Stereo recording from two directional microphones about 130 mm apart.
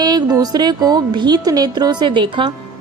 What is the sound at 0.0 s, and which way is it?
A woman's voice, 30° right (ahead or behind).